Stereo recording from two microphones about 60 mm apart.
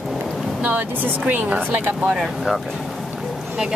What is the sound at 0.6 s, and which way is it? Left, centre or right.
A woman's voice, right.